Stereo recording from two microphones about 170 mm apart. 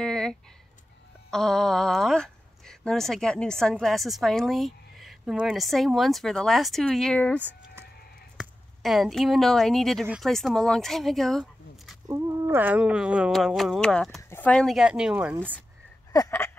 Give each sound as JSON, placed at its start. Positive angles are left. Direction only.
{"t": 0.0, "sound": "a sound", "side_deg": 5}
{"t": 1.3, "sound": "speech", "side_deg": 5}
{"t": 12.1, "sound": "speech", "side_deg": -15}
{"t": 16.1, "sound": "speech", "side_deg": 20}